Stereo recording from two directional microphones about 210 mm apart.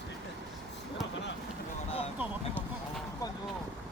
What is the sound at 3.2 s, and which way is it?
Vehicle, 15° left (ahead or behind).